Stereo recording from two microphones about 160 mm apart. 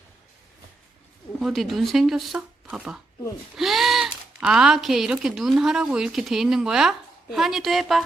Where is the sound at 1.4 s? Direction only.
Centre (ahead or behind).